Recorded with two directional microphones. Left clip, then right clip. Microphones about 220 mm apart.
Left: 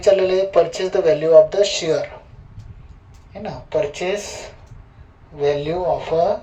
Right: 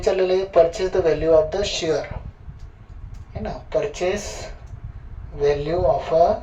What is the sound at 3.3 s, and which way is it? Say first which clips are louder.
Speech: left 1 dB; 20° left (ahead or behind).